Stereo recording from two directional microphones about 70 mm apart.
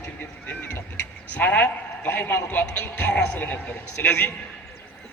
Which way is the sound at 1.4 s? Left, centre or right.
Left.